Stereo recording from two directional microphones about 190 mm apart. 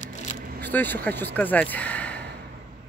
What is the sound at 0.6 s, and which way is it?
Vehicle, 10° left (ahead or behind).